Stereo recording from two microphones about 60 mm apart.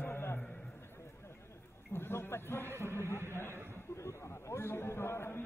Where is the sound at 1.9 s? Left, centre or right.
Left.